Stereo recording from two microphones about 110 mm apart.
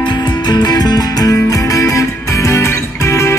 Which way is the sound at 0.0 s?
45° left (ahead or behind).